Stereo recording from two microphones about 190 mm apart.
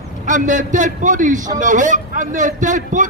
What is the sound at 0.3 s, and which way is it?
A man's voice, 40° right (ahead or behind).